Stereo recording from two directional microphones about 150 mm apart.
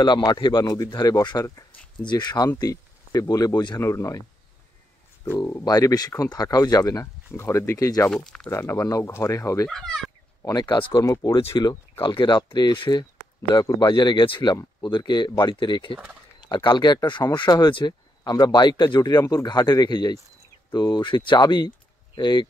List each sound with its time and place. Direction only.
0.0 s speech: 30° left (ahead or behind)
5.2 s speech: 20° left (ahead or behind)
8.1 s speech: 5° left (ahead or behind)
8.5 s speech: 20° left (ahead or behind)
9.7 s speech: centre (ahead or behind)
10.4 s speech: 25° left (ahead or behind)